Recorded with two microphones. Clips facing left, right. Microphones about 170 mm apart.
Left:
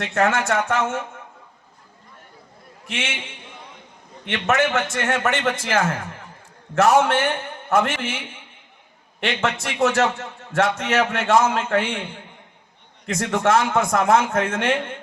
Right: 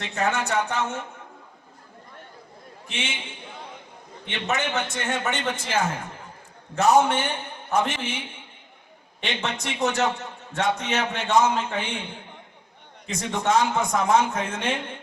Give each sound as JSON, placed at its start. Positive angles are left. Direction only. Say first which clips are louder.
{"t": 0.1, "sound": "a man's voice", "louder": "left 4 dB", "side_deg": 90}
{"t": 4.3, "sound": "a man's voice", "louder": "left 7 dB", "side_deg": 90}
{"t": 9.2, "sound": "a man's voice", "louder": "left 5 dB", "side_deg": 85}
{"t": 13.1, "sound": "a man's voice", "louder": "left 5 dB", "side_deg": 90}